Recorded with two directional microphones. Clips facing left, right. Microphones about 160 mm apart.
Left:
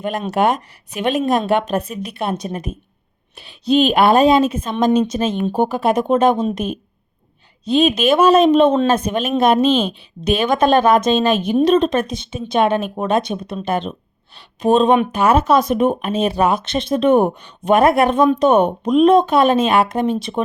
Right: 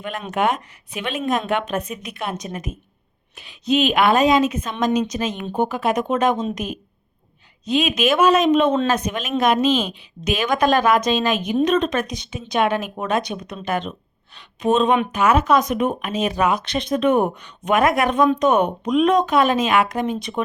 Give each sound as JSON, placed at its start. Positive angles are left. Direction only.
{"t": 0.0, "sound": "speech", "side_deg": 40}